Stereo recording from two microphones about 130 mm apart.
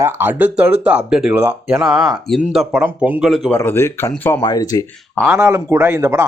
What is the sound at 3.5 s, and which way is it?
Speech, 15° left (ahead or behind).